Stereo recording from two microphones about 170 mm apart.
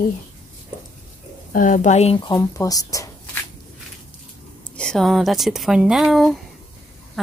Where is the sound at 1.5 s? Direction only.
50° left (ahead or behind).